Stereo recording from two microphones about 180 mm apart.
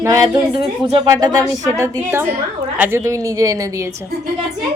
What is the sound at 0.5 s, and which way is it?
A woman's voice, 30° right (ahead or behind).